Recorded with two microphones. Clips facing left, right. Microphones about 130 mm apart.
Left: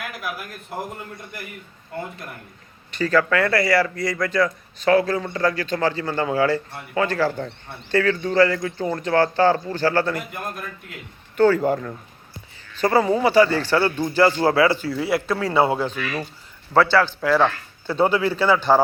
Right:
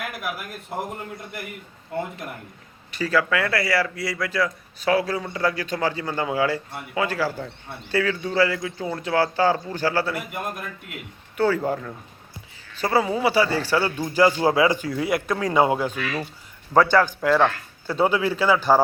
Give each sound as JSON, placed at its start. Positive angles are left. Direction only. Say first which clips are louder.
{"t": 2.9, "sound": "a man's voice", "louder": "left 3 dB", "side_deg": -5}